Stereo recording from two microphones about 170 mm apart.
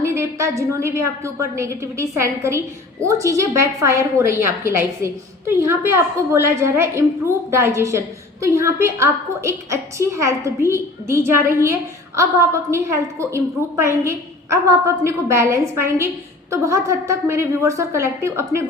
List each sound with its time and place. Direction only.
0.0 s a woman's voice: 15° right (ahead or behind)